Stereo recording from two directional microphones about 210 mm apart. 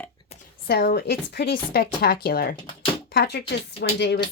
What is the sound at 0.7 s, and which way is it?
Speech, 50° left (ahead or behind).